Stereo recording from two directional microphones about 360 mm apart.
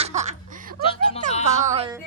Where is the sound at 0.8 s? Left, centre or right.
Centre.